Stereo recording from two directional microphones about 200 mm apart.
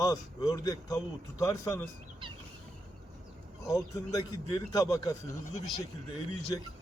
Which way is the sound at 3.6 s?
15° left (ahead or behind).